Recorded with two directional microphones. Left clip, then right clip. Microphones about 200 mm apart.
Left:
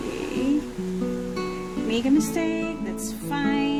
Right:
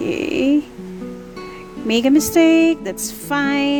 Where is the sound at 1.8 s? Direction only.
55° right (ahead or behind).